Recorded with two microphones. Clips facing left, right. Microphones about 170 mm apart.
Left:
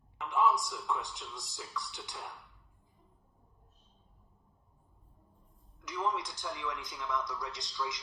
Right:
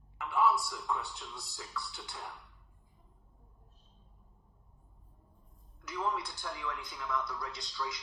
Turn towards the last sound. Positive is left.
turn(degrees=20)  # may be behind; listen again after turning